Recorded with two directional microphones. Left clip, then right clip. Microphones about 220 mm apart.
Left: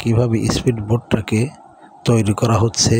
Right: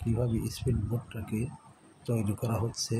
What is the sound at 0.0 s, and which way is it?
A man's voice, 40° left (ahead or behind).